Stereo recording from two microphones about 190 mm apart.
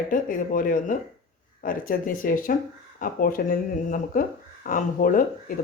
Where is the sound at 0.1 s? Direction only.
45° left (ahead or behind).